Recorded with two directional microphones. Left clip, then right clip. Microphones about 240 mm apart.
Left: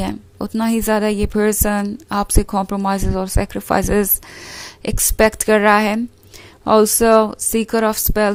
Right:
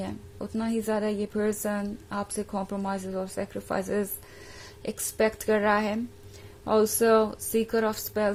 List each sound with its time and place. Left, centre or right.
0.0 s a woman's voice: left